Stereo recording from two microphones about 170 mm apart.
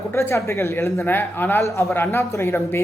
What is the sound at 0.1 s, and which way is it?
Speech, 15° left (ahead or behind).